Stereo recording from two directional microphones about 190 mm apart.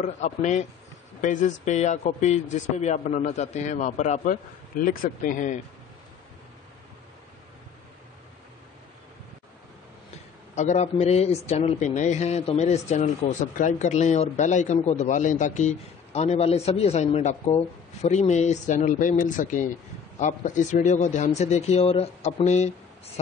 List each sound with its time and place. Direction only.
0.0 s a man's voice: 40° left (ahead or behind)
10.5 s a man's voice: 35° left (ahead or behind)